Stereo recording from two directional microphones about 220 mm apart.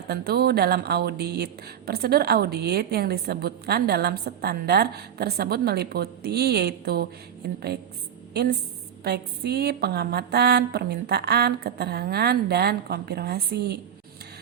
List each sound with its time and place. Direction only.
0.1 s a woman's voice: 45° right (ahead or behind)